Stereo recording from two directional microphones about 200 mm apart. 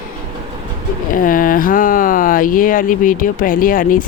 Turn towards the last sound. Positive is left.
turn(degrees=45)  # may be behind; listen again after turning